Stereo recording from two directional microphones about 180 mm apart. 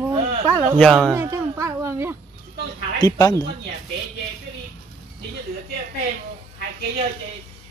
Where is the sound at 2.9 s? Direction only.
20° left (ahead or behind).